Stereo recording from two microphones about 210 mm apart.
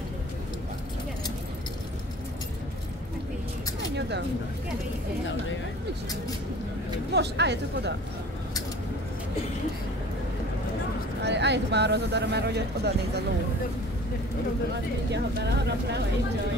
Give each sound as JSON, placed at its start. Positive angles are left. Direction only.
{"t": 7.2, "sound": "speech", "side_deg": -55}
{"t": 11.2, "sound": "speech", "side_deg": -55}
{"t": 15.0, "sound": "speech", "side_deg": -55}